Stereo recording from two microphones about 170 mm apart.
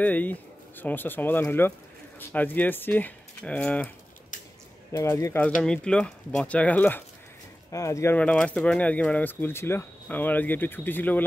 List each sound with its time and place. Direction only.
0.0 s speech: 10° left (ahead or behind)
4.9 s speech: 15° left (ahead or behind)
5.6 s speech: 5° left (ahead or behind)